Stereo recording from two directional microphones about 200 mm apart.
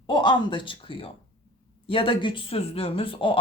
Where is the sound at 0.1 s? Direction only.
20° left (ahead or behind).